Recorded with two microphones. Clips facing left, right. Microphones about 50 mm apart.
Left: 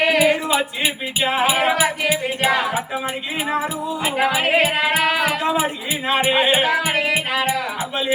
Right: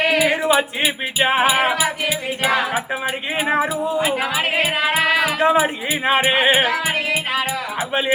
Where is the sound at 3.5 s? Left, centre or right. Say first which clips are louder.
Right 4 dB; right.